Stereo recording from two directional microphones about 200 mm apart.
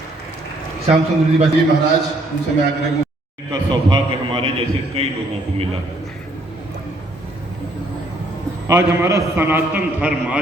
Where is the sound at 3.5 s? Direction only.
25° right (ahead or behind).